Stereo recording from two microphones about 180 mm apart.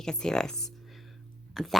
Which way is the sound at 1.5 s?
Centre (ahead or behind).